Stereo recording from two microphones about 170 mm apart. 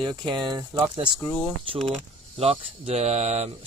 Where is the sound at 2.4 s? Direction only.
35° right (ahead or behind).